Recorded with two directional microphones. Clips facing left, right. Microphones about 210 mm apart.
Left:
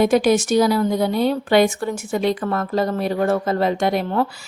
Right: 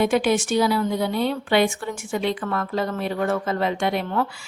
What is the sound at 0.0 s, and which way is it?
A woman's voice, 40° left (ahead or behind).